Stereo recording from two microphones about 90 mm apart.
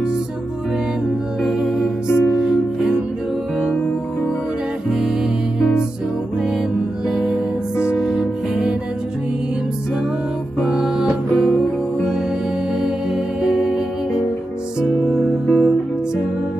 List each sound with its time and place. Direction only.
2.0 s music: 25° left (ahead or behind)
2.3 s music: 5° right (ahead or behind)
4.8 s music: 5° right (ahead or behind)
7.1 s music: 5° right (ahead or behind)
7.7 s music: 30° left (ahead or behind)
8.0 s music: 5° right (ahead or behind)
10.6 s music: 5° right (ahead or behind)
11.4 s music: 5° left (ahead or behind)
12.7 s music: 5° right (ahead or behind)
15.1 s music: 25° left (ahead or behind)